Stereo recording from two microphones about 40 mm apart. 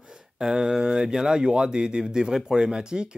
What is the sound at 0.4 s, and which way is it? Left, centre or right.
Speech, centre.